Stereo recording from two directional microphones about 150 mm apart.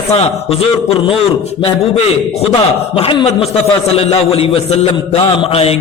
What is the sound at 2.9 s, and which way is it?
A man's voice, 35° left (ahead or behind).